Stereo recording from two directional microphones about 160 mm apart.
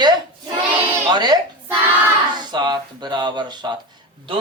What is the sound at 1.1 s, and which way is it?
A man's voice, 25° right (ahead or behind).